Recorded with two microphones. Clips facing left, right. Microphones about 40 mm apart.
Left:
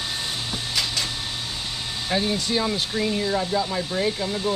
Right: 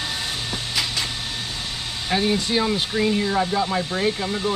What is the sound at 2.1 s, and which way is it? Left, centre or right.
Speech, centre.